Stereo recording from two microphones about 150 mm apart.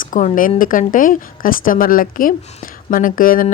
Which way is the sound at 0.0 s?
55° left (ahead or behind).